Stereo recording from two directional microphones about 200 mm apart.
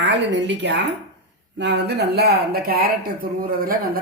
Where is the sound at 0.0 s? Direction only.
60° right (ahead or behind).